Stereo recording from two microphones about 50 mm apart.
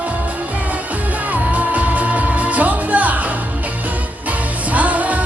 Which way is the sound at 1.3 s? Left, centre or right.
Right.